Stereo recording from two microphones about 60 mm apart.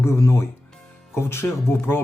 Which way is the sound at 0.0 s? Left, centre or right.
Left.